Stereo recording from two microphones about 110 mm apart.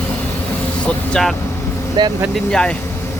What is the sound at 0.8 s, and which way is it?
Speech, 5° left (ahead or behind).